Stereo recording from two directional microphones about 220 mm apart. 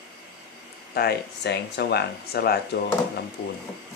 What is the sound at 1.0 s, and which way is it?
Speech, 45° left (ahead or behind).